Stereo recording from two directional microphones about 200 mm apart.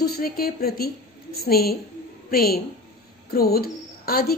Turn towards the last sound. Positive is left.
turn(degrees=50)  # may be behind; listen again after turning